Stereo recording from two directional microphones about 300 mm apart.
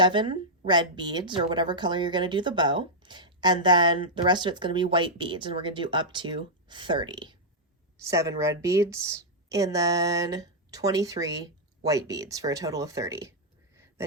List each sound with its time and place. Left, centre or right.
0.0 s a woman's voice: centre